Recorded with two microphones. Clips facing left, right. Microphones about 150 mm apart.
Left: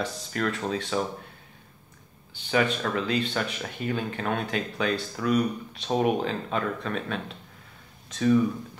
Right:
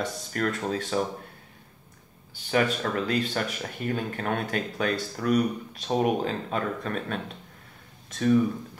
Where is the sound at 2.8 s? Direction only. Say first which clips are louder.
Even; 45° right (ahead or behind).